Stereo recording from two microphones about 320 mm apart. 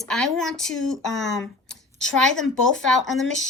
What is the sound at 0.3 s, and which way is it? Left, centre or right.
Speech, centre.